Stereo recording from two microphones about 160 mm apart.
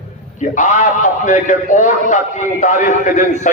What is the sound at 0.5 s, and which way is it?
A man's voice, 50° left (ahead or behind).